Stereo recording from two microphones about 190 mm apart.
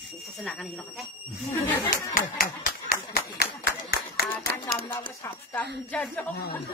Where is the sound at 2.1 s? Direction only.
50° left (ahead or behind).